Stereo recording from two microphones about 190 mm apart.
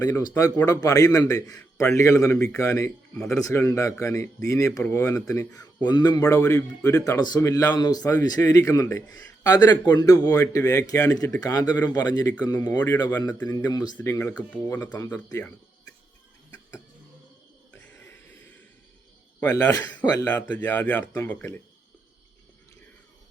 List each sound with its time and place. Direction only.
0.0 s a man's voice: 20° left (ahead or behind)
17.8 s a sound: 10° left (ahead or behind)
19.4 s a man's voice: 10° left (ahead or behind)